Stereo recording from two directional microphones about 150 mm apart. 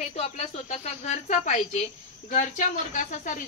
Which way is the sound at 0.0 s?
50° left (ahead or behind).